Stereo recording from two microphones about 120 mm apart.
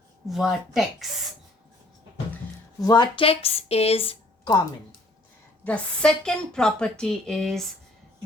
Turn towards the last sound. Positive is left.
turn(degrees=0)  # may be behind; listen again after turning